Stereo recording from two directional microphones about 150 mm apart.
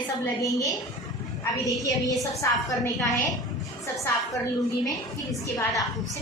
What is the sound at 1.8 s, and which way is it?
Speech, 25° left (ahead or behind).